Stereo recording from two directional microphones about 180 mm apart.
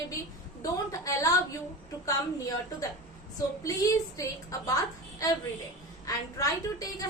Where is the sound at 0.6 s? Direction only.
20° left (ahead or behind).